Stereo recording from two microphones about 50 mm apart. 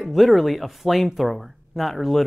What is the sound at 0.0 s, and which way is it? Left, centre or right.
Speech, centre.